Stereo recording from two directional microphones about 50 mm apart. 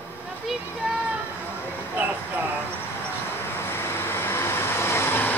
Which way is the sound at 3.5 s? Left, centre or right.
Left.